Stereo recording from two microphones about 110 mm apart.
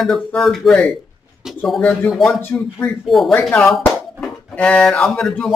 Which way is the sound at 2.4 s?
15° left (ahead or behind).